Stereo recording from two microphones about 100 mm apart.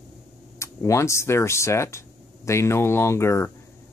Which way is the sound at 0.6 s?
30° left (ahead or behind).